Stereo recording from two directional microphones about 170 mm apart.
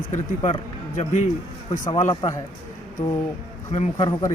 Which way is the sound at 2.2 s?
35° left (ahead or behind).